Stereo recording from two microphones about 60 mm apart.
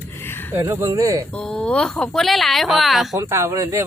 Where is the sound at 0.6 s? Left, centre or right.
Right.